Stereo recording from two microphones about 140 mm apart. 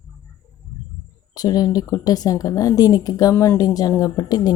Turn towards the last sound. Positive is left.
turn(degrees=25)  # may be behind; listen again after turning